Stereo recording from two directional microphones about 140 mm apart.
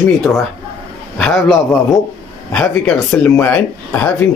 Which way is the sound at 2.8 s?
10° left (ahead or behind).